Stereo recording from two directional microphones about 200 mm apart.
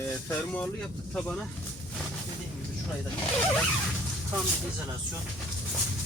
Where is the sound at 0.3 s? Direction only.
5° left (ahead or behind).